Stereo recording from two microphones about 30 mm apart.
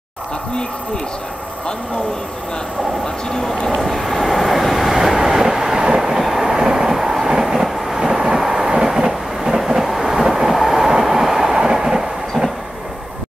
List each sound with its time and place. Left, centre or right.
3.3 s speech: centre
3.8 s train: centre
6.5 s train: centre
8.1 s vehicle: centre
8.8 s train: centre
9.6 s train: centre